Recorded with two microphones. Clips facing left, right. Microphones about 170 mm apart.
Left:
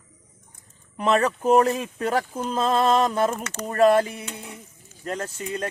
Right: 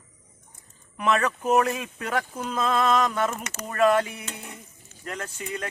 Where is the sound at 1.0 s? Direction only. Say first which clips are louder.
Left 3 dB; 30° left (ahead or behind).